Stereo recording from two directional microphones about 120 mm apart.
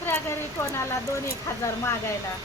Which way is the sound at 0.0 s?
20° left (ahead or behind).